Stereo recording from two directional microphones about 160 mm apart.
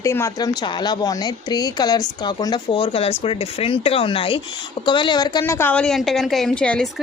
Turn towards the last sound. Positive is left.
turn(degrees=5)  # may be behind; listen again after turning